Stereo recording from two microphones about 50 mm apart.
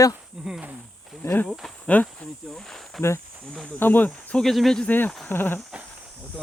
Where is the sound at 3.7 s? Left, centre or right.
Left.